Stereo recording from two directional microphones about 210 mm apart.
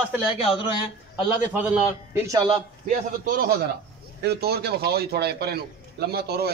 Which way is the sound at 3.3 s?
45° right (ahead or behind).